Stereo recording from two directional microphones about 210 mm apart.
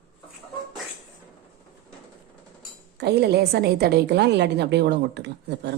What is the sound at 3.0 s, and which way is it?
A woman's voice, 50° right (ahead or behind).